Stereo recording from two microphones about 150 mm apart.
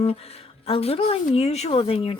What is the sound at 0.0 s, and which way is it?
A woman's voice, 40° left (ahead or behind).